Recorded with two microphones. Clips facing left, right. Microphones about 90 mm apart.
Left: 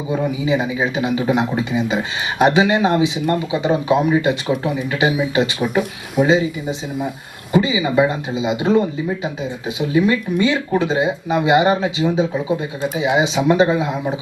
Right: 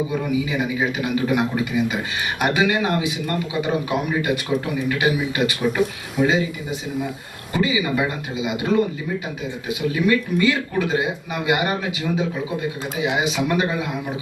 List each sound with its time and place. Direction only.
0.1 s a man's voice: 25° left (ahead or behind)